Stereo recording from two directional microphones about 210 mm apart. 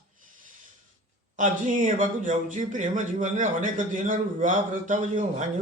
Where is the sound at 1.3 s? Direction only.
35° right (ahead or behind).